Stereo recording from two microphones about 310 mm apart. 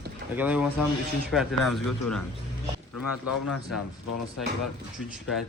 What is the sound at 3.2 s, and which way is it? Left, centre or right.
Speech, left.